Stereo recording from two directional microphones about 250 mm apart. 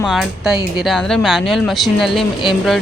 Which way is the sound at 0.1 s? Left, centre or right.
Centre.